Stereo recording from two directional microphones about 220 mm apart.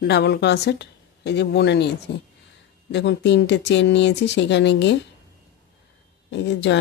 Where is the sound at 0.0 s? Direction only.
50° left (ahead or behind).